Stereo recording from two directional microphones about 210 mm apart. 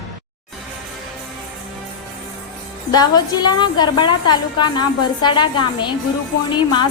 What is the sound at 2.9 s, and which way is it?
A woman's voice, 20° left (ahead or behind).